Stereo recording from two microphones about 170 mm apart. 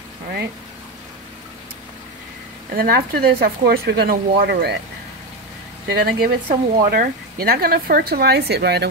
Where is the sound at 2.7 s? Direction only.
60° right (ahead or behind).